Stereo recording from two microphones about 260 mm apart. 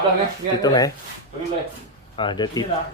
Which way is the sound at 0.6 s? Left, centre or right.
Centre.